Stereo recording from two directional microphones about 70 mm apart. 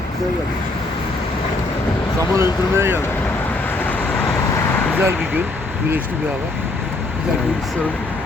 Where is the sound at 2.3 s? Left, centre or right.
Right.